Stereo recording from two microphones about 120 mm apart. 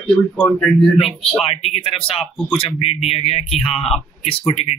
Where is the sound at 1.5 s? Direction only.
60° left (ahead or behind).